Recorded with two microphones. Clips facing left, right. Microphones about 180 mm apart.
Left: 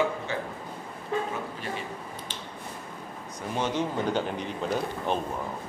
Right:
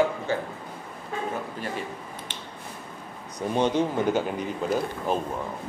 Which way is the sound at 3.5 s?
15° right (ahead or behind).